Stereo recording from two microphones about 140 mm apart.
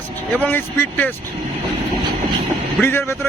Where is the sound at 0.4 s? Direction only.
10° left (ahead or behind).